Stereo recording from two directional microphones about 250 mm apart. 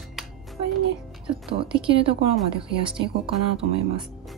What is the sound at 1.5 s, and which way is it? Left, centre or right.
Speech, right.